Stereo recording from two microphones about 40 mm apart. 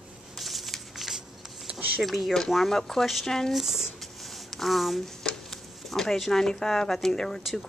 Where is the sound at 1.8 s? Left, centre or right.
Right.